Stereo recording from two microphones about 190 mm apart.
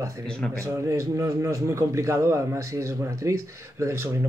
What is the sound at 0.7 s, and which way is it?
A man's voice, 15° right (ahead or behind).